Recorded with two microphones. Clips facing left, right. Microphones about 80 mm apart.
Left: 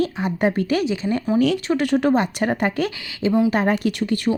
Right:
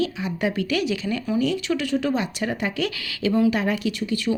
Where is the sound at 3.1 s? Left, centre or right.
Left.